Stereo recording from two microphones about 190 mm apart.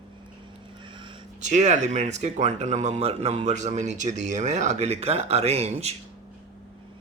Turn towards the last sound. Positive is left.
turn(degrees=-35)  # may be behind; listen again after turning